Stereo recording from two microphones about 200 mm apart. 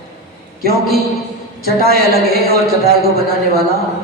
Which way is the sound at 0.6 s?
50° right (ahead or behind).